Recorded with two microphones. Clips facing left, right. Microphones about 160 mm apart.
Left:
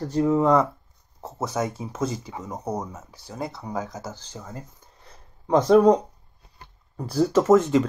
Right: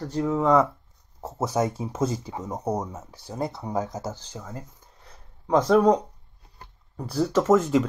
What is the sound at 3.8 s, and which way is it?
Speech, 30° right (ahead or behind).